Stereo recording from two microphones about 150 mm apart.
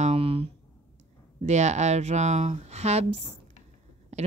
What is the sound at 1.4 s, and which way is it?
Speech, 50° right (ahead or behind).